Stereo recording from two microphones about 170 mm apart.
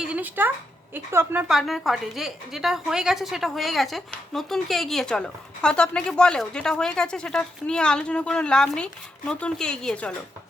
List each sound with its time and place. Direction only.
0.0 s a sound: 10° right (ahead or behind)
0.9 s a woman's voice: 10° right (ahead or behind)
1.5 s a woman's voice: centre (ahead or behind)